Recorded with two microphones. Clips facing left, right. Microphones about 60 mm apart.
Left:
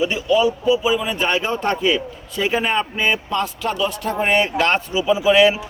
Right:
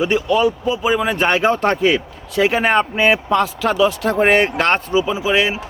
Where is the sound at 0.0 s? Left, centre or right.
Right.